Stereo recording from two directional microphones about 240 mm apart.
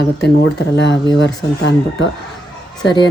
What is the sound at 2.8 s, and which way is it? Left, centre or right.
Speech, centre.